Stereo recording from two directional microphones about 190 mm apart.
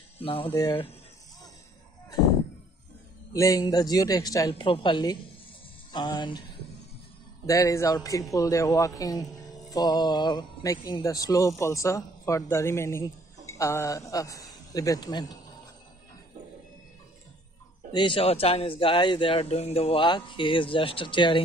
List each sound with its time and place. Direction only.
0.2 s speech: 30° left (ahead or behind)
0.5 s a man's voice: 10° left (ahead or behind)
3.3 s speech: 20° left (ahead or behind)
7.4 s a man's voice: 15° left (ahead or behind)
17.9 s speech: 25° left (ahead or behind)